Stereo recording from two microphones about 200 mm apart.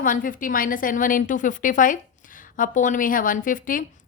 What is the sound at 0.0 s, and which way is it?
A woman's voice, 40° left (ahead or behind).